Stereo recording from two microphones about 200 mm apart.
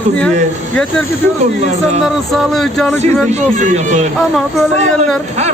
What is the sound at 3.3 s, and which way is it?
Speech, 40° right (ahead or behind).